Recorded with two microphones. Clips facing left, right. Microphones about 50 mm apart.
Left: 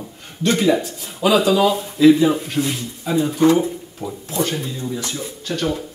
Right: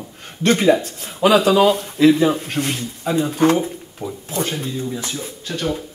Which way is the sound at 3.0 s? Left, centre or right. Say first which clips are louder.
Left 1 dB; right.